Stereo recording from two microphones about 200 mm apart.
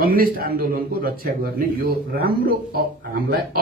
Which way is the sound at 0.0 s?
50° right (ahead or behind).